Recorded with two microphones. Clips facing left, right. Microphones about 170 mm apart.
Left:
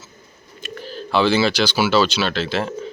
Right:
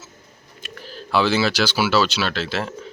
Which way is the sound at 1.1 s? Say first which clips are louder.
Left 2 dB; 5° right (ahead or behind).